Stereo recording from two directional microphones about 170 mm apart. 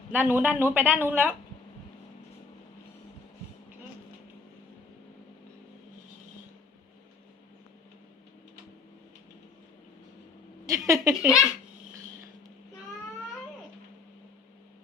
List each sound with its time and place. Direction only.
0.1 s speech: 10° right (ahead or behind)
10.7 s speech: 20° right (ahead or behind)
11.1 s speech: 5° right (ahead or behind)